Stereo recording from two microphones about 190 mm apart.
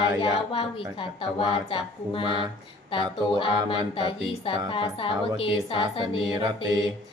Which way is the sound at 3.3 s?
25° left (ahead or behind).